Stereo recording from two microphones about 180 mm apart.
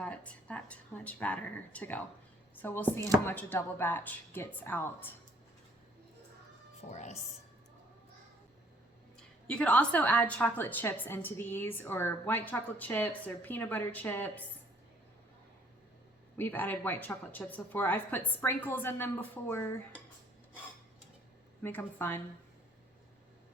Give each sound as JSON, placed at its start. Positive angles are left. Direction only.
{"t": 0.0, "sound": "a woman's voice", "side_deg": 5}
{"t": 6.9, "sound": "speech", "side_deg": 40}
{"t": 9.5, "sound": "a woman's voice", "side_deg": 5}
{"t": 16.4, "sound": "a woman's voice", "side_deg": 10}
{"t": 21.6, "sound": "a woman's voice", "side_deg": 10}